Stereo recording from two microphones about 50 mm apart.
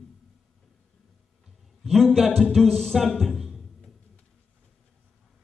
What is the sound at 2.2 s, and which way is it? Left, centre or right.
Music, centre.